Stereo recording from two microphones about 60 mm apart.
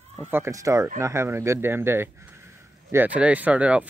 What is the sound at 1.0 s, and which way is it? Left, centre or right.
Speech, right.